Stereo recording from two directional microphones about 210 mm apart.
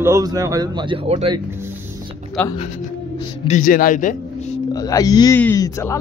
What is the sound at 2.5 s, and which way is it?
Speech, 30° left (ahead or behind).